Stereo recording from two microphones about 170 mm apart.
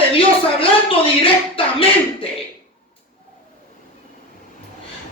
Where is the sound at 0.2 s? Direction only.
30° left (ahead or behind).